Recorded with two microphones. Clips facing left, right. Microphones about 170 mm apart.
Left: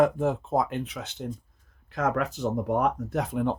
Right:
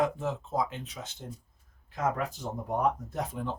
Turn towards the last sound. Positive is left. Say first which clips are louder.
# left 7 dB
turn(degrees=65)  # may be behind; listen again after turning